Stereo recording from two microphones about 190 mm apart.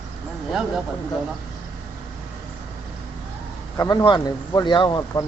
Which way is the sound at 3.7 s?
15° left (ahead or behind).